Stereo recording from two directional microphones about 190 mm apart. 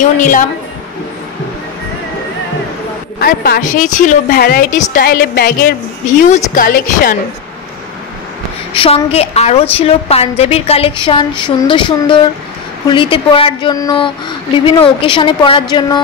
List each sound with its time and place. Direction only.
0.0 s a woman's voice: 40° left (ahead or behind)
3.2 s a woman's voice: 50° left (ahead or behind)
6.0 s a woman's voice: 40° left (ahead or behind)
8.7 s a woman's voice: 30° left (ahead or behind)